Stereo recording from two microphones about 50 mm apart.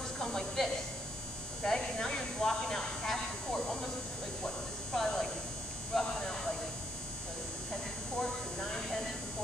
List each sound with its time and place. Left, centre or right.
0.2 s a woman's voice: centre
4.9 s speech: centre
8.2 s a sound: centre